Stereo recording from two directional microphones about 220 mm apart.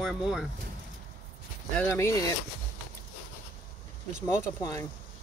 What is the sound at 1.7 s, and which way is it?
Speech, 10° left (ahead or behind).